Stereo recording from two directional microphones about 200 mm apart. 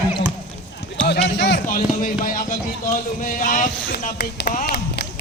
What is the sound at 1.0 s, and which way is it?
Run, 60° left (ahead or behind).